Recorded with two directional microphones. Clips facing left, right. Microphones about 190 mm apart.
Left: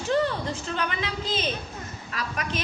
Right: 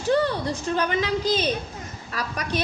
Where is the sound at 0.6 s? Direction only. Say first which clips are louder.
Right 6 dB; 40° right (ahead or behind).